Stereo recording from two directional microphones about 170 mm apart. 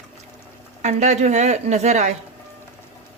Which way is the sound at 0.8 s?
40° right (ahead or behind).